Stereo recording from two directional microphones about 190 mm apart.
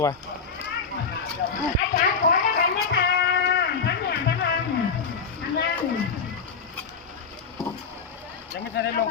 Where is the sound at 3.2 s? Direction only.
60° left (ahead or behind).